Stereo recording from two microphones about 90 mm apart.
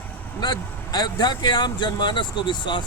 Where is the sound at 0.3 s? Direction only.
45° left (ahead or behind).